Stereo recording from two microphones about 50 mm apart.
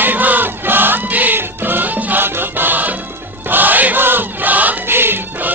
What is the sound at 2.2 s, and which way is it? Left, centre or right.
Music, right.